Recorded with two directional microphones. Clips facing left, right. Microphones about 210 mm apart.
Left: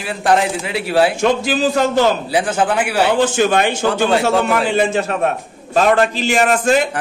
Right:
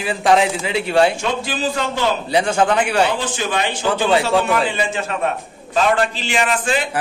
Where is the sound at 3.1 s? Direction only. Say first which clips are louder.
Left 8 dB; 50° left (ahead or behind).